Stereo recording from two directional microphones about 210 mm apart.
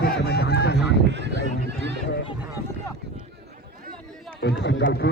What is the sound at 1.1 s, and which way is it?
Speech, 55° right (ahead or behind).